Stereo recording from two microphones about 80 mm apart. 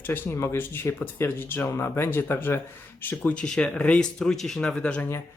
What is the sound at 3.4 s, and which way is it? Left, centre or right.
Speech, centre.